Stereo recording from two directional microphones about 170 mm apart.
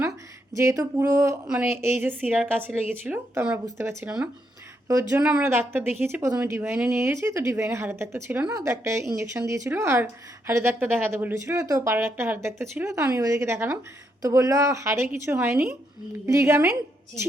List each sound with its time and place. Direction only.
0.5 s a woman's voice: 20° right (ahead or behind)